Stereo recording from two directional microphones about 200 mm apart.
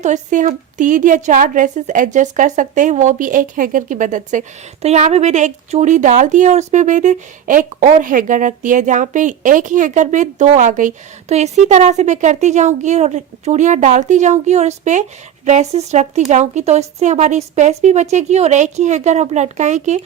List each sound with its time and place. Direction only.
0.0 s a woman's voice: 40° right (ahead or behind)